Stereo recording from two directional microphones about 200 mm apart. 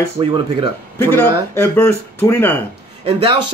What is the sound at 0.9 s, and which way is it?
Speech, 10° left (ahead or behind).